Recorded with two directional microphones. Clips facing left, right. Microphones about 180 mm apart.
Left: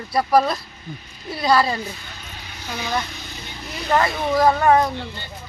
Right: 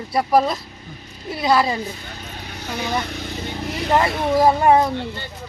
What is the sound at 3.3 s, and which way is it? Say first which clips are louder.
Vehicle: right 9 dB; 55° right (ahead or behind).